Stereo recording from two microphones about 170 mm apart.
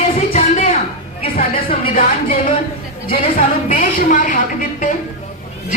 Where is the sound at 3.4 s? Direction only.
50° left (ahead or behind).